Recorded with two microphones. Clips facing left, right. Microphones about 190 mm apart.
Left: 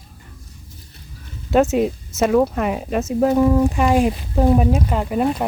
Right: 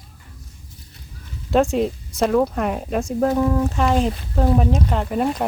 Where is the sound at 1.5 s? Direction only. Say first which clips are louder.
Left 2 dB; 5° left (ahead or behind).